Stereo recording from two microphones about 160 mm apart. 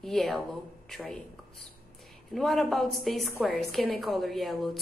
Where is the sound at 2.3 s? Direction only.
Centre (ahead or behind).